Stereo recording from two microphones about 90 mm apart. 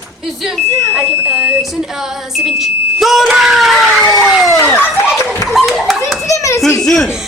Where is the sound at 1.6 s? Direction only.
5° right (ahead or behind).